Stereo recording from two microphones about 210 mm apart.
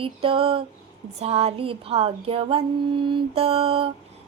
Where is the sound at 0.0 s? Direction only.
25° right (ahead or behind).